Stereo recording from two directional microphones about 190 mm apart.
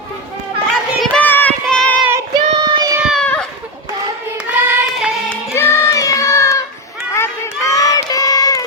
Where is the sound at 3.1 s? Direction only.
5° left (ahead or behind).